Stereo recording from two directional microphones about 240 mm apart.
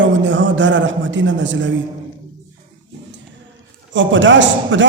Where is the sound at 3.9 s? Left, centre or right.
Right.